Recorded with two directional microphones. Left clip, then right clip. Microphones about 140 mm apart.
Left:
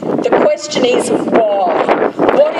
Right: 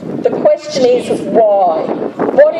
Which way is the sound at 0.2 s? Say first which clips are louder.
Right 1 dB; 40° left (ahead or behind).